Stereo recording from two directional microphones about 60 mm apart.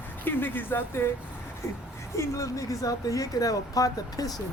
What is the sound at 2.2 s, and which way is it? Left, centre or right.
Speech, left.